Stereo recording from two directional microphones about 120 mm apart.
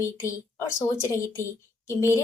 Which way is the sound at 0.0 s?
25° left (ahead or behind).